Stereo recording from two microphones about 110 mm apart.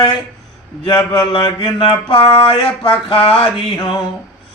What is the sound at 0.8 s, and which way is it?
A man's voice, 40° left (ahead or behind).